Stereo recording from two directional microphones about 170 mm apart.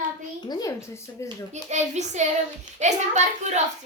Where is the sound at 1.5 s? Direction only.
40° right (ahead or behind).